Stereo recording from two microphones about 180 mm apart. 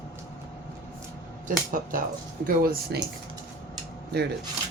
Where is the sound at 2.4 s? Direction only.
55° right (ahead or behind).